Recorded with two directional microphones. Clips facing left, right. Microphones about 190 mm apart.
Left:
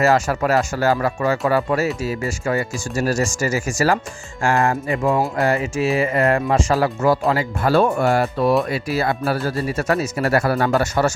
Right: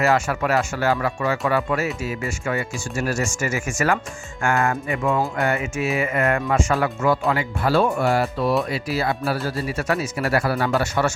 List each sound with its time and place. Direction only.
0.0 s speech: 40° left (ahead or behind)